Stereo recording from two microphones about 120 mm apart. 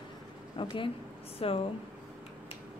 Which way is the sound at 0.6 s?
45° left (ahead or behind).